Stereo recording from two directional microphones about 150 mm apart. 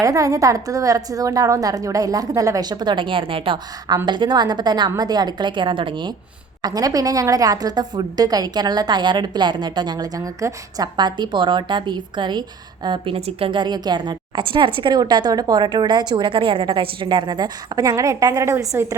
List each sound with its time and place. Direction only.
0.0 s a woman's voice: 20° right (ahead or behind)